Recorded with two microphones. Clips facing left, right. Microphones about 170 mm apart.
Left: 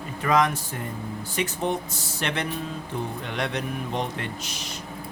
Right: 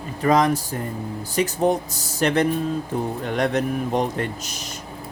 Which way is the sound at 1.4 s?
40° right (ahead or behind).